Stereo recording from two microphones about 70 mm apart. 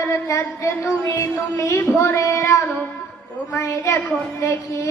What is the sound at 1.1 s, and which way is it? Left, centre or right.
Music, left.